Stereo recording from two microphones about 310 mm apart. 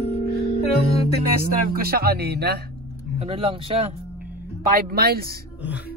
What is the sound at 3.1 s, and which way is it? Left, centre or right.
Speech, centre.